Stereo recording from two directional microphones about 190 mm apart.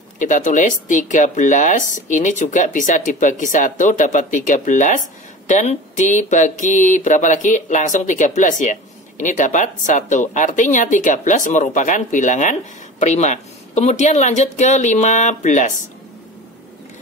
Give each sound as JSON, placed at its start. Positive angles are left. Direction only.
{"t": 0.2, "sound": "speech", "side_deg": 40}